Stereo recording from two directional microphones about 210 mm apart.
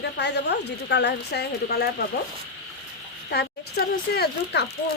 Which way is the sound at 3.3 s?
50° left (ahead or behind).